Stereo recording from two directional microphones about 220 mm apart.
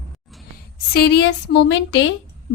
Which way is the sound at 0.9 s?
50° left (ahead or behind).